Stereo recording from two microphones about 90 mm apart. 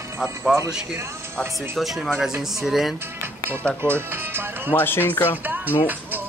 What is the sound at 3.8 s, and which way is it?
Speech, 25° right (ahead or behind).